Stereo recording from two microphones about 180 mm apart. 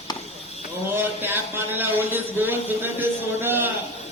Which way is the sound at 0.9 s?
10° right (ahead or behind).